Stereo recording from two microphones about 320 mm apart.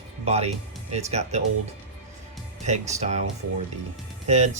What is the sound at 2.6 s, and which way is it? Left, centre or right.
Speech, right.